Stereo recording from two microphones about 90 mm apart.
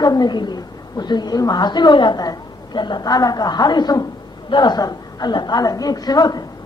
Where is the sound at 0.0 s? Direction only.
50° left (ahead or behind).